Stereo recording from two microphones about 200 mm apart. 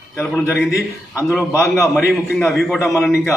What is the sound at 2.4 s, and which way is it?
Speech, centre (ahead or behind).